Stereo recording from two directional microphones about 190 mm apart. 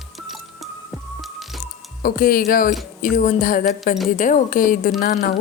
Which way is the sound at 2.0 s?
50° left (ahead or behind).